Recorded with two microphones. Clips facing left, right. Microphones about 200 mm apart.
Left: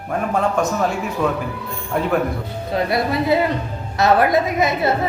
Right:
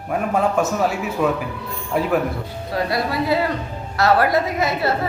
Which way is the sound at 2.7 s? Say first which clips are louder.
Left 2 dB; 20° left (ahead or behind).